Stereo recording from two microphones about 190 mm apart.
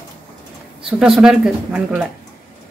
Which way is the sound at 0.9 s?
5° right (ahead or behind).